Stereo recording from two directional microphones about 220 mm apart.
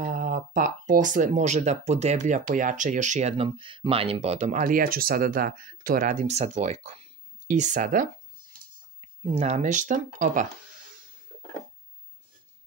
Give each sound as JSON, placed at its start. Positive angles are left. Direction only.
{"t": 0.0, "sound": "speech", "side_deg": -40}
{"t": 9.2, "sound": "speech", "side_deg": -30}